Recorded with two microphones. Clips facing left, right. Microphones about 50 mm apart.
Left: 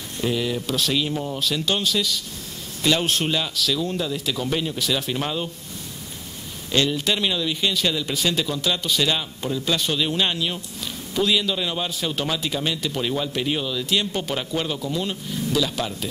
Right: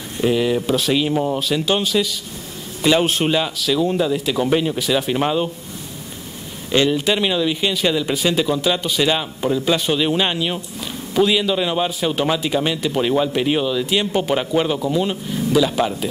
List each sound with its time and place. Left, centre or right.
0.2 s speech: centre
1.4 s a man's voice: centre
6.7 s a man's voice: centre